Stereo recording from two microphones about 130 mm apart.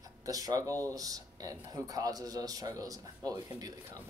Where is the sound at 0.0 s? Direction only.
30° right (ahead or behind).